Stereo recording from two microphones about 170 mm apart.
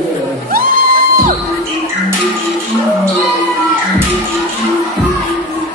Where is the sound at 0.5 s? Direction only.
60° right (ahead or behind).